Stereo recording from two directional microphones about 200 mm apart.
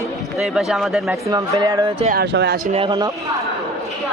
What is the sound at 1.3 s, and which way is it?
Speech, 20° right (ahead or behind).